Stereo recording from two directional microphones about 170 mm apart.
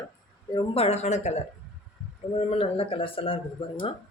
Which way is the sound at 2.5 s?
35° left (ahead or behind).